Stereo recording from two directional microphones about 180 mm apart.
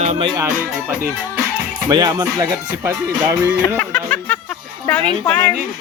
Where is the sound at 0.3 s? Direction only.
15° right (ahead or behind).